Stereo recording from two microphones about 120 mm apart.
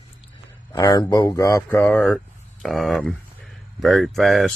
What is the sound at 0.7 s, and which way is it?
Speech, 35° left (ahead or behind).